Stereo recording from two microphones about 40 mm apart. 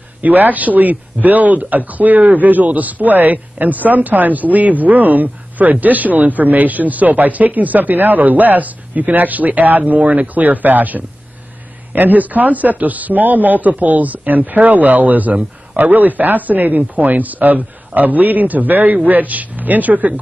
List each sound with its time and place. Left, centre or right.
0.2 s speech: right